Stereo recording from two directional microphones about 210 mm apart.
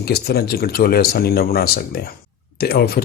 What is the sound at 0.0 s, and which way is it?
Speech, 50° left (ahead or behind).